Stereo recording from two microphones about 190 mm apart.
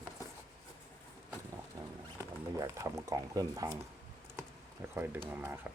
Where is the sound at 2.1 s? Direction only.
15° right (ahead or behind).